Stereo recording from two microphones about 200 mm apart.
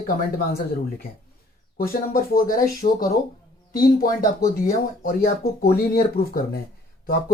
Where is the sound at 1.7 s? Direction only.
45° left (ahead or behind).